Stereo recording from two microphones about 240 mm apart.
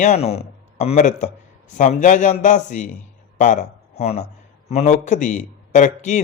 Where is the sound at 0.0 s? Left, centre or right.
Left.